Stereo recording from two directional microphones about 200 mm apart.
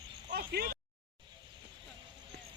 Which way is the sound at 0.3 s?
50° right (ahead or behind).